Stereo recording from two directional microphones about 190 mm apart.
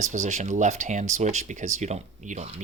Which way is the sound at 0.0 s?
40° right (ahead or behind).